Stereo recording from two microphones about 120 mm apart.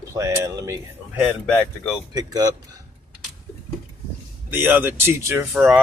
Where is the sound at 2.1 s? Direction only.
30° right (ahead or behind).